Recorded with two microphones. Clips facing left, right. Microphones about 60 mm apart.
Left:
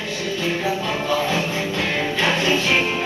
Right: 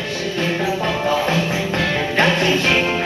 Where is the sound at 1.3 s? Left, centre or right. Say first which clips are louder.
Right 3 dB; right.